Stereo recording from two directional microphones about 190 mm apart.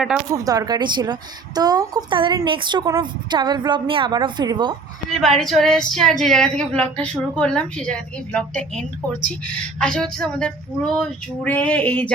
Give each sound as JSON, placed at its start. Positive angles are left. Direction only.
{"t": 0.4, "sound": "a woman's voice", "side_deg": -20}
{"t": 5.2, "sound": "a woman's voice", "side_deg": 0}